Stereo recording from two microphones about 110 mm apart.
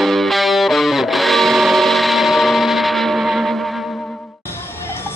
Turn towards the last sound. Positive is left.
turn(degrees=0)  # may be behind; listen again after turning